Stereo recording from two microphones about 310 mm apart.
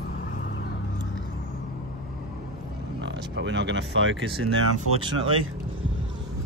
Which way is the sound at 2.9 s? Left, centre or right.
Right.